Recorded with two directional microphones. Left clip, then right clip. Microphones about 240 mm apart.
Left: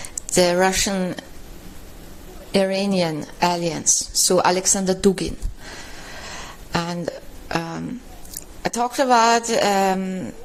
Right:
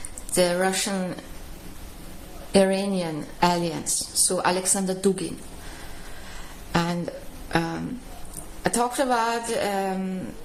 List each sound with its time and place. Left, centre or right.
0.3 s a woman's voice: left
2.5 s a woman's voice: left
6.7 s a woman's voice: left